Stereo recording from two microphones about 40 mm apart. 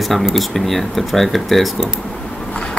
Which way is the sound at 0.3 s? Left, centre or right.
Centre.